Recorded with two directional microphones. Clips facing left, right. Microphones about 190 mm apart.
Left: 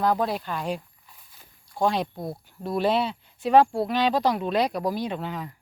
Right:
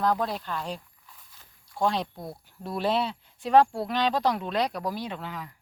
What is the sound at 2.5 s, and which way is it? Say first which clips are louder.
Speech: left 3 dB; centre (ahead or behind).